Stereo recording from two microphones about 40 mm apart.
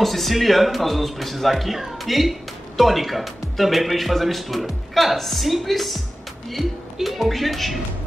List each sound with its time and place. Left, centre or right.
0.0 s speech: centre